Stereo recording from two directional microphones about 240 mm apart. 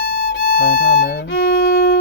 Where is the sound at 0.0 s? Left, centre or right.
Left.